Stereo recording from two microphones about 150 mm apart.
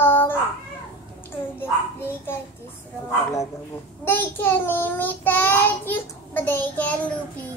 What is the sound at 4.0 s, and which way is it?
Child singing, 15° left (ahead or behind).